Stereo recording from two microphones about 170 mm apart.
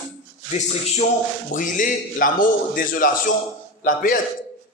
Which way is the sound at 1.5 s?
50° left (ahead or behind).